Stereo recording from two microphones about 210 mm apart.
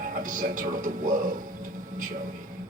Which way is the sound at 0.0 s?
40° right (ahead or behind).